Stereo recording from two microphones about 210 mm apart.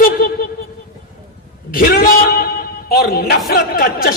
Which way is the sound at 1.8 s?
45° left (ahead or behind).